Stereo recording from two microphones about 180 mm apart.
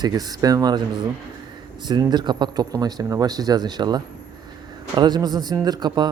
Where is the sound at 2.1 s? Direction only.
25° right (ahead or behind).